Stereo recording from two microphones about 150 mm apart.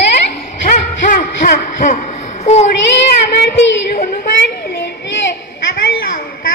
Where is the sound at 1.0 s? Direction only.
70° left (ahead or behind).